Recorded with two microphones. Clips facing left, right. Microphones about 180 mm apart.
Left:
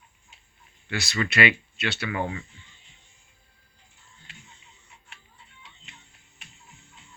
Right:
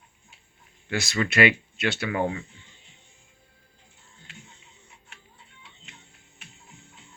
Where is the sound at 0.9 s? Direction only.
50° right (ahead or behind).